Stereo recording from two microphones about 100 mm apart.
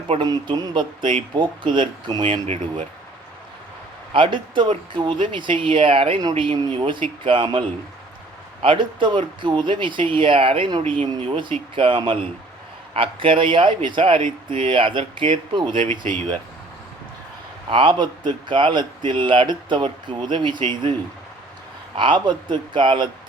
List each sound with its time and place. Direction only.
0.2 s speech: 45° right (ahead or behind)
4.1 s speech: 55° right (ahead or behind)
8.6 s speech: 55° right (ahead or behind)
17.7 s speech: 60° right (ahead or behind)
21.9 s speech: 55° right (ahead or behind)